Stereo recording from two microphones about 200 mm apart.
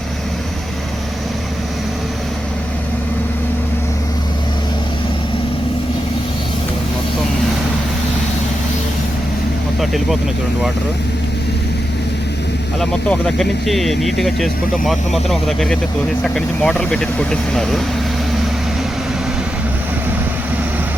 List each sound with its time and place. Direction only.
9.8 s speech: centre (ahead or behind)
12.8 s speech: 5° left (ahead or behind)